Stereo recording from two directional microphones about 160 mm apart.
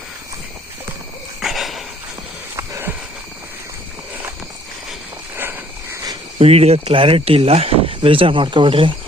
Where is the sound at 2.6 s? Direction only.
15° right (ahead or behind).